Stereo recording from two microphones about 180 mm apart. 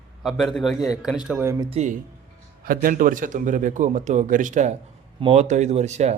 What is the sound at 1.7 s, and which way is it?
A man's voice, 40° right (ahead or behind).